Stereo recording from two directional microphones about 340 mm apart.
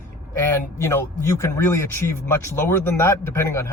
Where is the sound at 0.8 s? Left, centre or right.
Centre.